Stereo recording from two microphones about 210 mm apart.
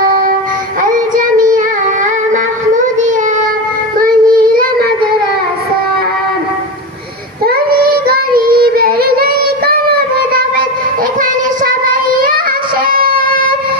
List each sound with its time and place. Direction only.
0.9 s child singing: 40° right (ahead or behind)
4.0 s child singing: 40° right (ahead or behind)
7.8 s child singing: 45° right (ahead or behind)
12.8 s a sound: 40° right (ahead or behind)